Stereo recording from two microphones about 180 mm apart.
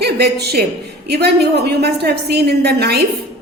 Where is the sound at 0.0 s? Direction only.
65° right (ahead or behind).